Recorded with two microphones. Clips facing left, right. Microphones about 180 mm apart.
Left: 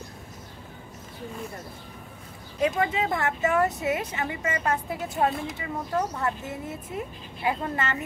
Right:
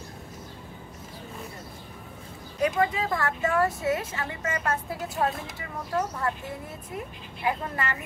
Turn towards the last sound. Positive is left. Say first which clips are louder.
# left 2 dB
turn(degrees=25)  # may be behind; listen again after turning